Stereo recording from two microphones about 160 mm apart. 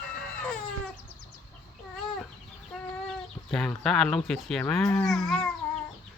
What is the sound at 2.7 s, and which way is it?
Chicken, 5° left (ahead or behind).